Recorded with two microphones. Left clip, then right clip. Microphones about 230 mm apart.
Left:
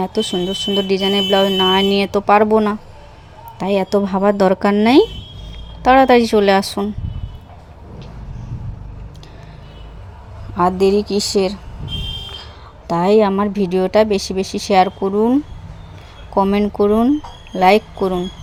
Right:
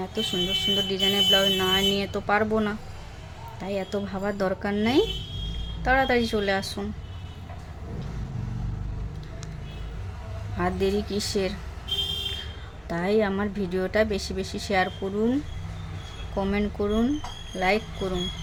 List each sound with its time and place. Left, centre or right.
0.2 s a woman's voice: left
10.6 s speech: left
12.9 s a woman's voice: left